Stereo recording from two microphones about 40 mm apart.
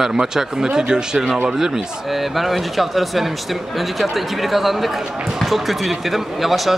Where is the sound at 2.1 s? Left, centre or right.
Centre.